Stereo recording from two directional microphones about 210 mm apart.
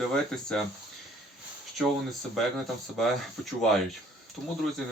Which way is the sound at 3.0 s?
Centre (ahead or behind).